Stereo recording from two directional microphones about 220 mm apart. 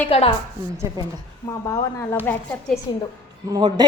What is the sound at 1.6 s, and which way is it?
A woman's voice, 15° left (ahead or behind).